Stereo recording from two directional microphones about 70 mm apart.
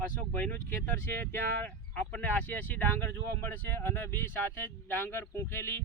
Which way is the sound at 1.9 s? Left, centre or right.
Left.